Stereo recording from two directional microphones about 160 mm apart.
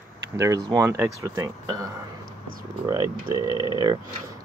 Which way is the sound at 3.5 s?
30° left (ahead or behind).